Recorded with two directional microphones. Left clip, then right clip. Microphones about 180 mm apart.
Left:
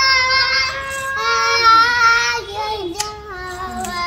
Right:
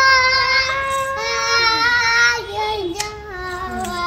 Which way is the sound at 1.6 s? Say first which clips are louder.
Left 6 dB; 15° left (ahead or behind).